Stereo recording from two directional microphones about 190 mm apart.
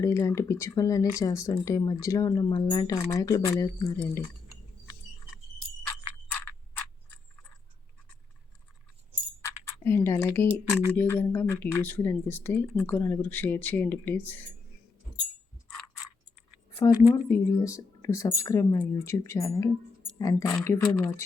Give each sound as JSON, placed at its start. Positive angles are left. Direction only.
{"t": 0.0, "sound": "speech", "side_deg": 15}
{"t": 9.4, "sound": "speech", "side_deg": 15}
{"t": 17.2, "sound": "speech", "side_deg": 15}